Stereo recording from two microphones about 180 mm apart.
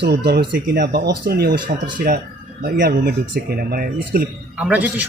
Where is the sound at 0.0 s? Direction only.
65° right (ahead or behind).